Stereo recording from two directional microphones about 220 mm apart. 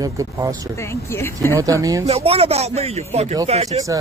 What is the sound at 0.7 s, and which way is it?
Speech, 10° left (ahead or behind).